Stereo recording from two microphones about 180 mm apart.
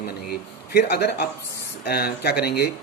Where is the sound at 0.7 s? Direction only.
60° left (ahead or behind).